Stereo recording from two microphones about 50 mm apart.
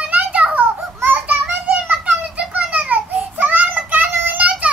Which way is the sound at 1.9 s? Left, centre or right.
Right.